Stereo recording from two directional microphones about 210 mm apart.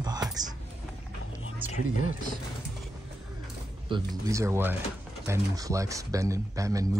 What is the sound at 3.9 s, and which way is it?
Speech, 15° right (ahead or behind).